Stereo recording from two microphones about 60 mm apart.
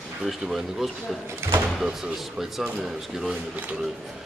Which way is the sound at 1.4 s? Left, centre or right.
Right.